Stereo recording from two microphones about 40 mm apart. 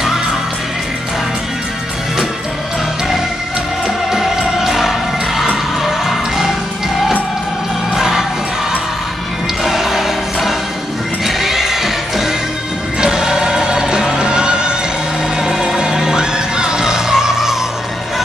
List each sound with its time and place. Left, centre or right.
3.8 s music: centre
7.9 s music: centre
9.6 s music: centre